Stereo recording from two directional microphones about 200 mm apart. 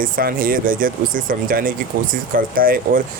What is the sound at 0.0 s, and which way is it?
Speech, 45° right (ahead or behind).